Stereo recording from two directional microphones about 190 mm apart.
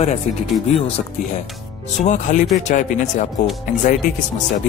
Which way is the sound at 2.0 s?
40° left (ahead or behind).